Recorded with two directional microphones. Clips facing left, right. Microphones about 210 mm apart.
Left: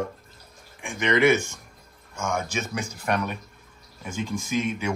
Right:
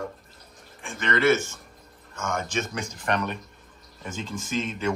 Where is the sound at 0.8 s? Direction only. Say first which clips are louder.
Left 2 dB; 15° left (ahead or behind).